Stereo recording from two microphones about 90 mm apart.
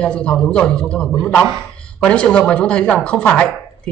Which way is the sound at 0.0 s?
10° left (ahead or behind).